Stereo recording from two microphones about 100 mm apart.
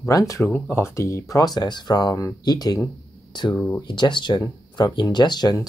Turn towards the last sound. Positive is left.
turn(degrees=45)  # may be behind; listen again after turning